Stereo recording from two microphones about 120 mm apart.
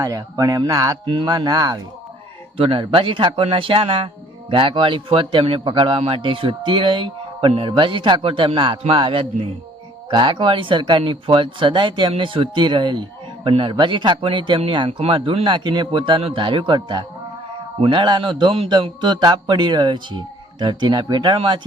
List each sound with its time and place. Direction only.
0.0 s speech: 30° right (ahead or behind)
1.0 s speech: 40° right (ahead or behind)
2.6 s speech: 45° right (ahead or behind)